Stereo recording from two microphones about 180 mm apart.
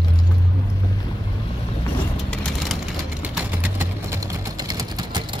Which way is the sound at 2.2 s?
Centre (ahead or behind).